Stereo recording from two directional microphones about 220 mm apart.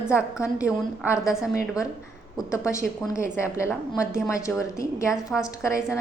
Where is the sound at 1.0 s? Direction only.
15° left (ahead or behind).